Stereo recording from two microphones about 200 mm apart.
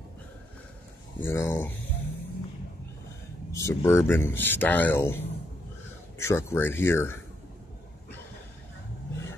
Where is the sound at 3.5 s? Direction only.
15° left (ahead or behind).